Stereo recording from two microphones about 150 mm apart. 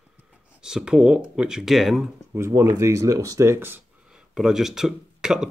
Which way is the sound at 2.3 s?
20° right (ahead or behind).